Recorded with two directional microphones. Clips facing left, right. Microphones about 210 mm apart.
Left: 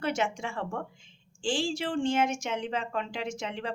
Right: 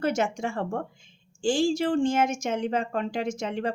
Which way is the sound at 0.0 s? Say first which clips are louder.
Right 4 dB; 45° right (ahead or behind).